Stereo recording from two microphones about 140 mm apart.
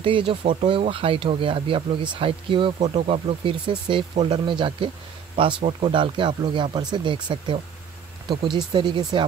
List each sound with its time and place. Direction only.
0.0 s speech: 40° right (ahead or behind)